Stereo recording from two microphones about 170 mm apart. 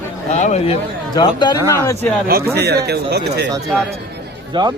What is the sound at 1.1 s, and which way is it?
Speech, 25° left (ahead or behind).